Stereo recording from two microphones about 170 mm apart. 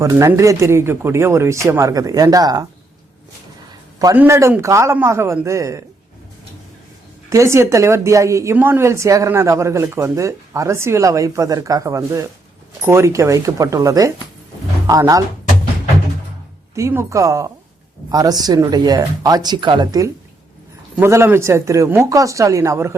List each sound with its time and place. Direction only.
0.0 s a woman's voice: 15° right (ahead or behind)
4.1 s a woman's voice: 15° right (ahead or behind)
7.3 s a woman's voice: 15° right (ahead or behind)
16.7 s a woman's voice: 15° right (ahead or behind)